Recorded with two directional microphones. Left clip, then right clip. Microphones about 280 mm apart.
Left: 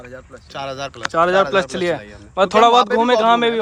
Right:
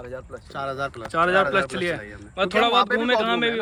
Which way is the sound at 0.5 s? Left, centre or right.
Left.